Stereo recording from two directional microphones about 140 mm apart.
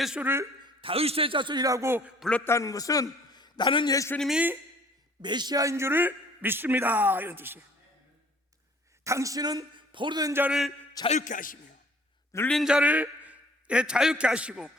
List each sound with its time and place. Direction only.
0.0 s a man's voice: 5° right (ahead or behind)
0.6 s a man's voice: 40° right (ahead or behind); by 2.1 s 15° right (ahead or behind)
2.1 s a man's voice: centre (ahead or behind)
2.4 s a man's voice: 20° left (ahead or behind)
3.9 s a man's voice: 20° left (ahead or behind)
4.2 s a man's voice: 5° right (ahead or behind)
5.2 s a man's voice: 30° right (ahead or behind); by 7.6 s 15° right (ahead or behind)
9.0 s a man's voice: 20° right (ahead or behind)
11.2 s a man's voice: 70° left (ahead or behind)
12.5 s a man's voice: centre (ahead or behind)